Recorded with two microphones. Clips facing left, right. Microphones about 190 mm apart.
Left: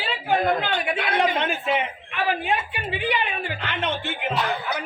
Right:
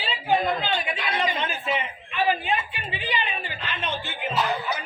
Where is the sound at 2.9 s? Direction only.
60° left (ahead or behind).